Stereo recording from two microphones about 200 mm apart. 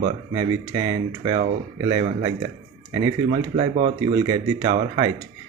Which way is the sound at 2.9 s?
20° right (ahead or behind).